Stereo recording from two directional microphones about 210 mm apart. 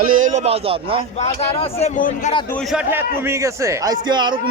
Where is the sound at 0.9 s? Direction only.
30° left (ahead or behind).